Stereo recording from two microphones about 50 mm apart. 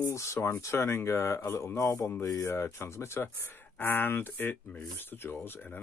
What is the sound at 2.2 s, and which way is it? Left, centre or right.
Speech, left.